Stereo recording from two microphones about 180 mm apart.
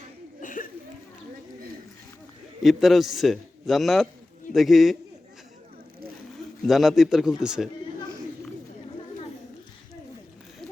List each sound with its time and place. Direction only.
0.4 s a sound: 50° left (ahead or behind)
2.6 s a man's voice: centre (ahead or behind)
6.7 s a man's voice: centre (ahead or behind)